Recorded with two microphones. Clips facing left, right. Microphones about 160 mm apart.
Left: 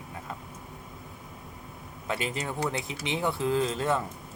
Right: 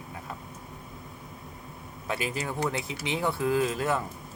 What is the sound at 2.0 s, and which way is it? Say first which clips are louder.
Speech: even; 25° left (ahead or behind).